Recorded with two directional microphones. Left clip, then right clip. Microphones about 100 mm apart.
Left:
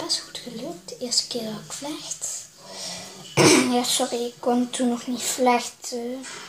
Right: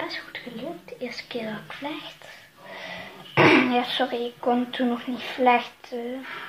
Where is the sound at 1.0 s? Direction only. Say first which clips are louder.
Left 6 dB; 15° left (ahead or behind).